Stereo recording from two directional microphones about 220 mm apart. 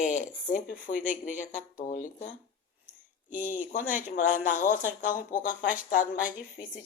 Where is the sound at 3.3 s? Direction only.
35° left (ahead or behind).